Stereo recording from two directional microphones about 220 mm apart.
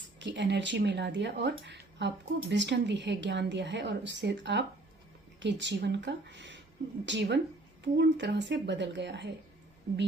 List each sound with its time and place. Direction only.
0.2 s speech: 55° right (ahead or behind)